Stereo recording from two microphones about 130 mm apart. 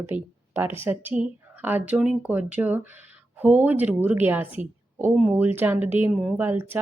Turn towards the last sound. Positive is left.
turn(degrees=-15)  # may be behind; listen again after turning